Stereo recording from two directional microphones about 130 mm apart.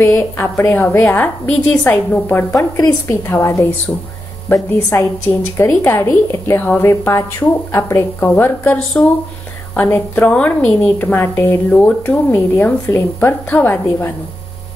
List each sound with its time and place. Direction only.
0.0 s a woman's voice: 20° left (ahead or behind)